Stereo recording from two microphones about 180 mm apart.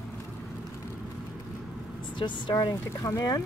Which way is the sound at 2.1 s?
25° left (ahead or behind).